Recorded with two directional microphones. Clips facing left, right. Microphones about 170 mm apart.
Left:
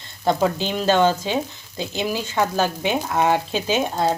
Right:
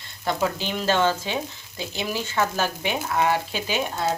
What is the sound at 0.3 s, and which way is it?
Speech, 20° left (ahead or behind).